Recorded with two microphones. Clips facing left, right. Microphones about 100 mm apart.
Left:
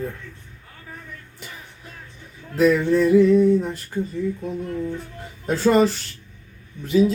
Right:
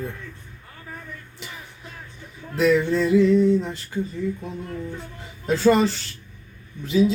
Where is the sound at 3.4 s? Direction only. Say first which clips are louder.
Left 2 dB; 10° left (ahead or behind).